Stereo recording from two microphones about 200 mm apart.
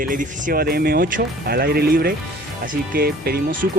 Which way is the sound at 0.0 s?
40° right (ahead or behind).